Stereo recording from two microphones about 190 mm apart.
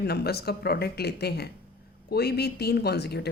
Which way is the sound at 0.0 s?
55° left (ahead or behind).